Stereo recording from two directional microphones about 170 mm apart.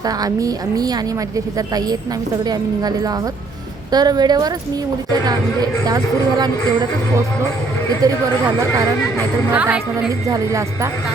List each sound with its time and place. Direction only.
0.2 s a woman's voice: 20° right (ahead or behind)
5.8 s a woman's voice: 25° right (ahead or behind)
8.0 s a woman's voice: 20° right (ahead or behind)
9.5 s a woman's voice: 10° right (ahead or behind)
10.2 s a woman's voice: 20° right (ahead or behind)